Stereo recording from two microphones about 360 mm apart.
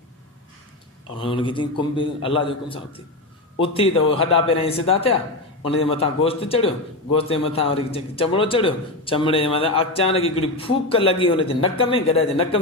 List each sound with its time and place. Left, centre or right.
1.2 s a man's voice: centre